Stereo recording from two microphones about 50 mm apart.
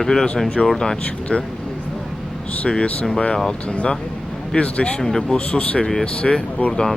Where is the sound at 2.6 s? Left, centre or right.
Left.